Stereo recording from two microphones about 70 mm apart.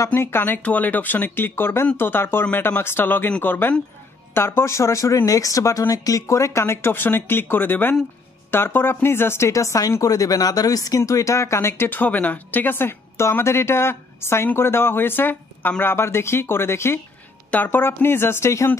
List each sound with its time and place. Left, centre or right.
0.1 s speech: left
0.6 s speech: left
17.5 s speech: left